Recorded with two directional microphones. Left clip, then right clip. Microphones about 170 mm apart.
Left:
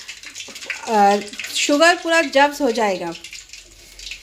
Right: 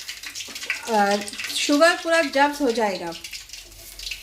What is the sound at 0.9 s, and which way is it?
A woman's voice, 40° left (ahead or behind).